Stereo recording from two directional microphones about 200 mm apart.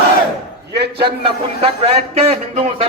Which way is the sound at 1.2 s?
30° right (ahead or behind).